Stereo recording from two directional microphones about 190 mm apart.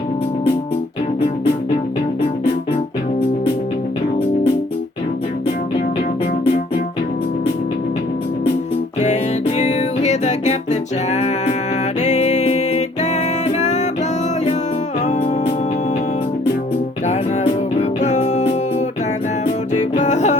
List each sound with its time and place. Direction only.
9.6 s music: 35° left (ahead or behind)
17.1 s music: 35° left (ahead or behind)
19.7 s music: 40° left (ahead or behind)